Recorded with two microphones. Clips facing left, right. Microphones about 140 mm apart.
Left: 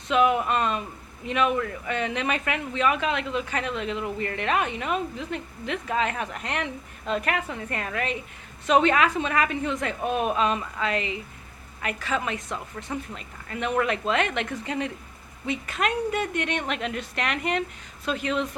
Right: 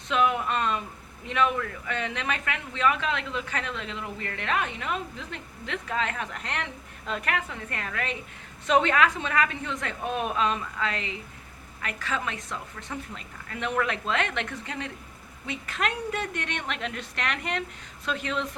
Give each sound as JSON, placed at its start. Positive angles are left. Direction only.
{"t": 0.1, "sound": "speech", "side_deg": 10}